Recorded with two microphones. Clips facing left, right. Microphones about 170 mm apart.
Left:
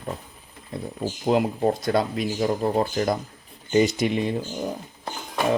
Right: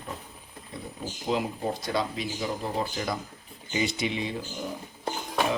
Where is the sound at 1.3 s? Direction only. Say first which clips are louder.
Left 7 dB; 55° left (ahead or behind).